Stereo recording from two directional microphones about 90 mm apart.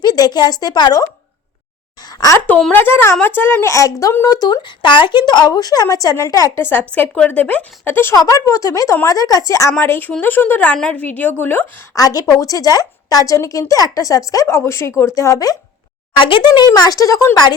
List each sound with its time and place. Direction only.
0.0 s speech: 50° left (ahead or behind)
2.7 s a woman's voice: 25° left (ahead or behind)
4.3 s speech: 50° left (ahead or behind)
6.6 s a woman's voice: 20° left (ahead or behind)
8.1 s a woman's voice: 45° left (ahead or behind)
9.8 s a woman's voice: 25° left (ahead or behind)
11.9 s a woman's voice: 40° left (ahead or behind)
16.1 s speech: 75° left (ahead or behind)
16.6 s a woman's voice: 45° left (ahead or behind)